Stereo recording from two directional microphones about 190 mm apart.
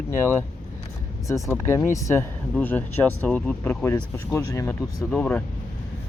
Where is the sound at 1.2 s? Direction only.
15° left (ahead or behind).